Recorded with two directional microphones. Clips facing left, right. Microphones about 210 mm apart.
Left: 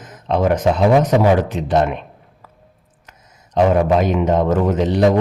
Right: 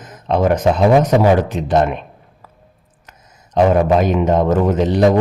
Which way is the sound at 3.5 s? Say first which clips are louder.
Right 1 dB; 40° right (ahead or behind).